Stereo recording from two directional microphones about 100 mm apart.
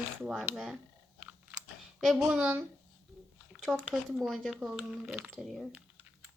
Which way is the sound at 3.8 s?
Centre (ahead or behind).